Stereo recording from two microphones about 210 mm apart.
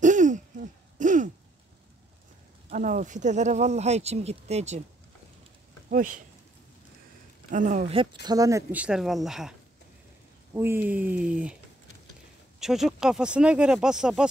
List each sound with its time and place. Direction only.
0.0 s hoot: 35° right (ahead or behind)
2.7 s speech: 40° right (ahead or behind)
5.9 s speech: 40° right (ahead or behind)
7.5 s speech: 35° right (ahead or behind); by 11.5 s 5° right (ahead or behind)
12.5 s speech: centre (ahead or behind)